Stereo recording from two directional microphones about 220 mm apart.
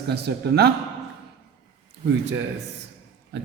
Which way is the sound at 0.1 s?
45° right (ahead or behind).